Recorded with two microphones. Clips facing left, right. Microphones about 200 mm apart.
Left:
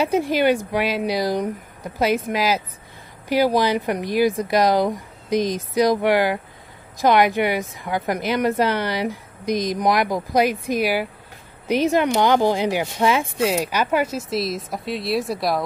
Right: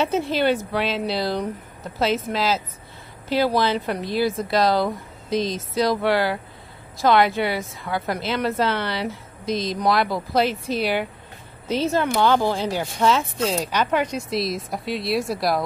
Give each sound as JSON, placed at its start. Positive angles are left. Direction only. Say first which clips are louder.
{"t": 0.0, "sound": "a woman's voice", "louder": "left 2 dB", "side_deg": 15}